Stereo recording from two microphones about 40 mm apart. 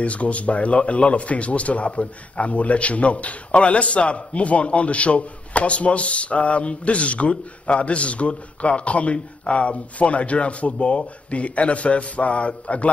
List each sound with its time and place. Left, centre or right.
0.0 s speech: left